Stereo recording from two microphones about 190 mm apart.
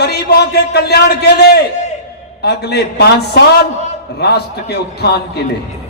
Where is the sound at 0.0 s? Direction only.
60° left (ahead or behind).